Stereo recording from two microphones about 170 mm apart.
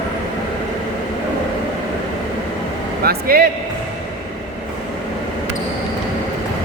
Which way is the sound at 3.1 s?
60° right (ahead or behind).